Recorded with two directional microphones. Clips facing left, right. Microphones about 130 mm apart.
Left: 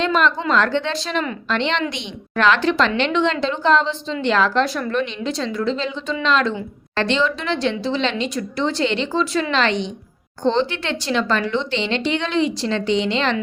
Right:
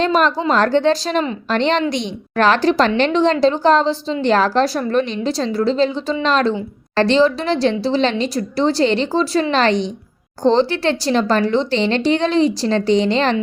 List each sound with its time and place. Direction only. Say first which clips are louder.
0.0 s a woman's voice: right 3 dB; 40° right (ahead or behind)